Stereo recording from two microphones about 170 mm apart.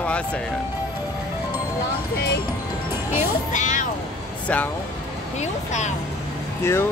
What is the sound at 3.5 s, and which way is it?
Music, 45° left (ahead or behind).